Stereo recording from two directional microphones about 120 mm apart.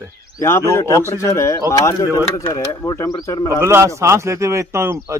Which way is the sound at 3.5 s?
20° right (ahead or behind).